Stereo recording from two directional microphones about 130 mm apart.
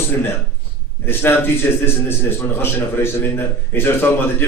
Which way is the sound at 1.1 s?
15° left (ahead or behind).